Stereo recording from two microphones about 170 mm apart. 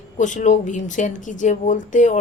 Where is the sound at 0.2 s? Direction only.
45° left (ahead or behind).